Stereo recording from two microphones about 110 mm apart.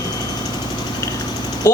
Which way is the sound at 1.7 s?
25° left (ahead or behind).